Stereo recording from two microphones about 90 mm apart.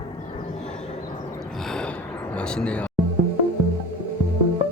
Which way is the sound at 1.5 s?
5° left (ahead or behind).